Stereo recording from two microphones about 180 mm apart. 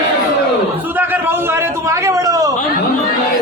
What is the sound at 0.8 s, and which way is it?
A man's voice, 10° right (ahead or behind).